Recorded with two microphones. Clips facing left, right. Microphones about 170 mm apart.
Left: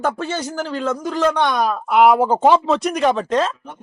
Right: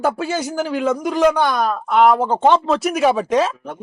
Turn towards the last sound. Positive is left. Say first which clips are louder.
# right 2 dB
turn(degrees=-10)  # may be behind; listen again after turning